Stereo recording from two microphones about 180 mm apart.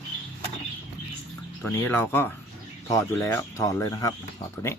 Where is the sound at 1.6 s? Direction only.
10° left (ahead or behind).